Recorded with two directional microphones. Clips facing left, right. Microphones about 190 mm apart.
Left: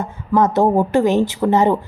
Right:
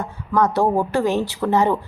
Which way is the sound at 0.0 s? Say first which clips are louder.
Left 3 dB; 20° left (ahead or behind).